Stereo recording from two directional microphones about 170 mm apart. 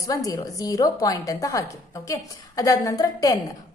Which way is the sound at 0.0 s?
20° left (ahead or behind).